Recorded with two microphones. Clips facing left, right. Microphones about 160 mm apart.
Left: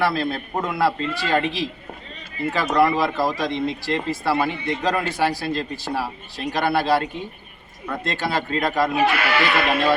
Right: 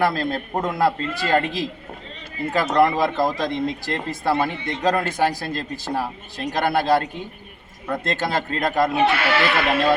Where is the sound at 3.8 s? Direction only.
45° right (ahead or behind).